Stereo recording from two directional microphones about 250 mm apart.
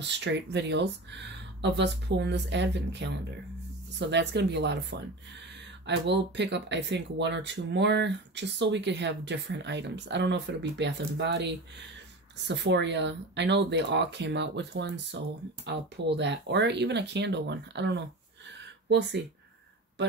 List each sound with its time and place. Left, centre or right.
0.0 s speech: right